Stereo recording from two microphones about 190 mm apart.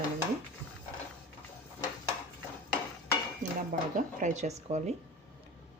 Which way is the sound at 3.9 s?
40° right (ahead or behind).